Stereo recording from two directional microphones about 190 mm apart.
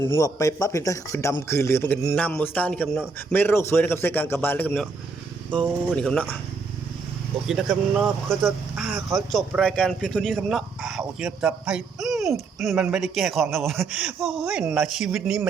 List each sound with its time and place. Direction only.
0.1 s a man's voice: 15° left (ahead or behind)
7.4 s speech: centre (ahead or behind)